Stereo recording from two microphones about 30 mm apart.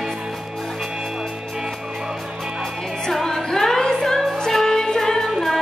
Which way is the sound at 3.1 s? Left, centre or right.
Centre.